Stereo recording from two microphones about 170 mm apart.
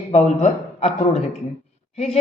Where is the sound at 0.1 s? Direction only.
40° left (ahead or behind).